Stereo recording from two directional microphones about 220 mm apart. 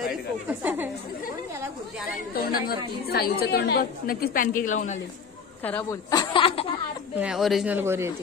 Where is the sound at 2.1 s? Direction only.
45° left (ahead or behind).